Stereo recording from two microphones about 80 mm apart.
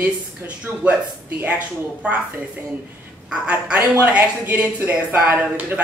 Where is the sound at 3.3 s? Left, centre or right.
Centre.